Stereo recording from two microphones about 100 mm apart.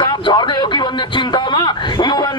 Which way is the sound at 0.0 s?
50° left (ahead or behind).